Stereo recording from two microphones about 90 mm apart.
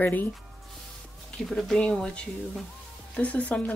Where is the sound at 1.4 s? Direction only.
5° left (ahead or behind).